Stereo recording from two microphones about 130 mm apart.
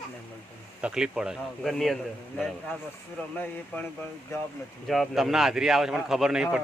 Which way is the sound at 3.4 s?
15° left (ahead or behind).